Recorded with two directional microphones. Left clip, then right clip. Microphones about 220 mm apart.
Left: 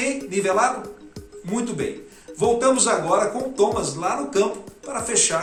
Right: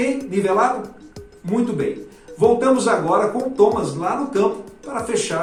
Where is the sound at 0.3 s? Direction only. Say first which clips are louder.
Right 1 dB; 20° left (ahead or behind).